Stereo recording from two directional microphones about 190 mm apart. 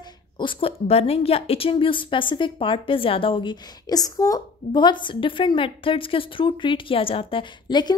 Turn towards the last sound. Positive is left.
turn(degrees=25)  # may be behind; listen again after turning